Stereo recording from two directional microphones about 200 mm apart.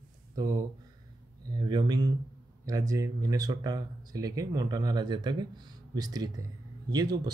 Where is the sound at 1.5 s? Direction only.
20° right (ahead or behind).